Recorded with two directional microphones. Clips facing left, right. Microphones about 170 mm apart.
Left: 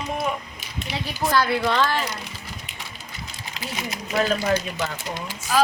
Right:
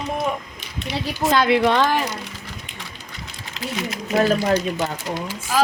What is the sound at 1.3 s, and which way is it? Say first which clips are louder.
Speech: right 5 dB; 20° right (ahead or behind).